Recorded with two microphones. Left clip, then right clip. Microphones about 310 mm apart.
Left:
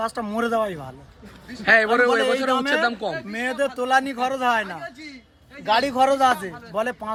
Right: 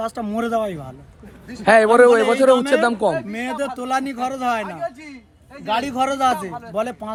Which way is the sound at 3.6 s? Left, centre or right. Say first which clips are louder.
Left 3 dB; centre.